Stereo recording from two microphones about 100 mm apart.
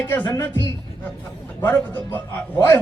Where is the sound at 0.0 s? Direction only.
15° left (ahead or behind).